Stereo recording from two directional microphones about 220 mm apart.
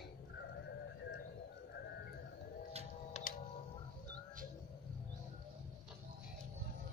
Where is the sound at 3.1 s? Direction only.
30° left (ahead or behind).